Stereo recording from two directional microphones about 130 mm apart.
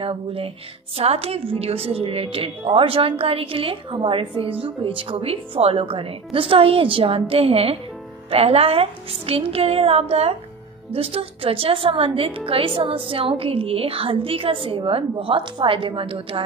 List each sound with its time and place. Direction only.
0.0 s a woman's voice: 45° right (ahead or behind)